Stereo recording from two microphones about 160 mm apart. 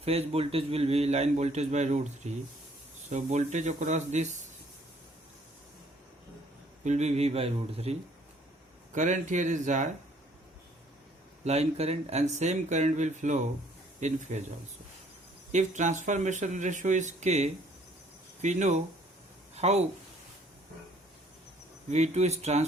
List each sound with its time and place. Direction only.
0.0 s a man's voice: 40° right (ahead or behind)
6.8 s a man's voice: 45° right (ahead or behind)
9.0 s speech: 50° right (ahead or behind)
11.4 s speech: 40° right (ahead or behind)
15.5 s speech: 50° right (ahead or behind)
21.8 s speech: 45° right (ahead or behind)